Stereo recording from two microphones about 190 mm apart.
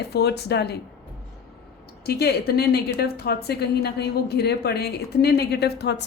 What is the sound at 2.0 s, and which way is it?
A woman's voice, 55° left (ahead or behind).